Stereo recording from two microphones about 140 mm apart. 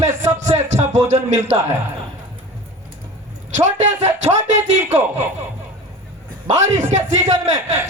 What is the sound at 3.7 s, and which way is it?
Speech, 55° right (ahead or behind).